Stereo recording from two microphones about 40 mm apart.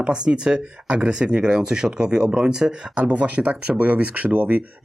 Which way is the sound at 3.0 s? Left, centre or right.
Right.